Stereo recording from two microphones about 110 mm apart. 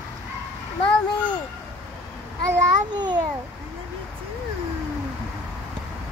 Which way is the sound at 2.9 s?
40° right (ahead or behind).